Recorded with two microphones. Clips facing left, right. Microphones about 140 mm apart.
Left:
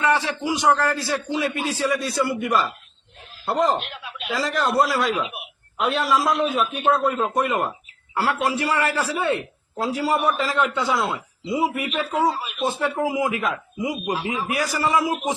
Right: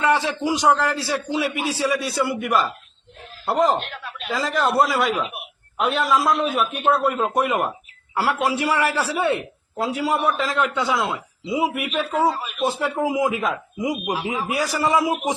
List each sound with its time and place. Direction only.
0.0 s a sound: 15° right (ahead or behind)
0.5 s speech: 15° right (ahead or behind)
9.7 s speech: centre (ahead or behind)
12.6 s speech: 15° right (ahead or behind)